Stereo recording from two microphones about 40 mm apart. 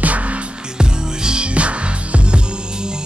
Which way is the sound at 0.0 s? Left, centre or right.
Right.